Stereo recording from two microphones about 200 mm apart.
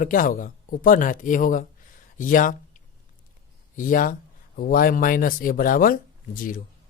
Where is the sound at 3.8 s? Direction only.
45° left (ahead or behind).